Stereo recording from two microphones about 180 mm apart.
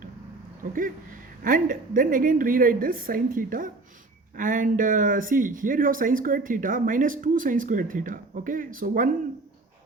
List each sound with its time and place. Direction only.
0.6 s speech: 50° right (ahead or behind)